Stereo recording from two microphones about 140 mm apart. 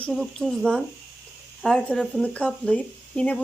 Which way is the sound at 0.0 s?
5° left (ahead or behind).